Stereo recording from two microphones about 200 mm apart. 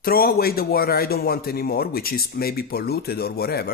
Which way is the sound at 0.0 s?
50° left (ahead or behind).